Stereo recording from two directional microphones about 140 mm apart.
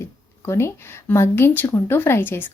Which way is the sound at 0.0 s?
20° left (ahead or behind).